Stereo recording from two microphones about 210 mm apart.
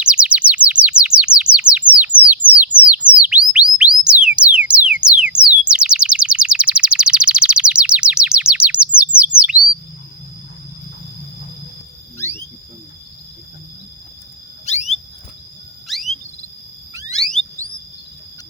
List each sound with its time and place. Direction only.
0.0 s bird: 5° right (ahead or behind)
3.1 s chirp tone: 5° right (ahead or behind)
4.4 s a sound: 5° right (ahead or behind)
14.6 s a sound: 35° left (ahead or behind)
15.9 s chirp tone: centre (ahead or behind)
17.1 s alarm: centre (ahead or behind)